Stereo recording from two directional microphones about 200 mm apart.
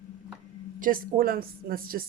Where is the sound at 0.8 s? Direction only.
45° right (ahead or behind).